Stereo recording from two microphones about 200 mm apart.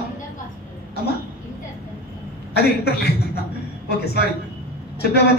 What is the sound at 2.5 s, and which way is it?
A man's voice, 50° left (ahead or behind).